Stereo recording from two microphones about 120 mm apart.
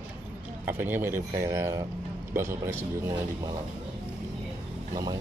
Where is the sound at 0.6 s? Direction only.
15° right (ahead or behind).